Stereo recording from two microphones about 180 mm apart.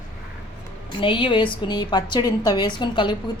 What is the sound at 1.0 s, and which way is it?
A woman's voice, 30° left (ahead or behind).